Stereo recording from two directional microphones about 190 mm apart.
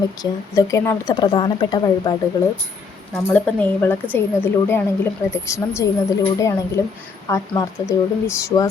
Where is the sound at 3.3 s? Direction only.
10° left (ahead or behind).